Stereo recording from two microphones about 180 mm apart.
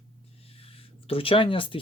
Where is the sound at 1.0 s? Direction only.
30° left (ahead or behind).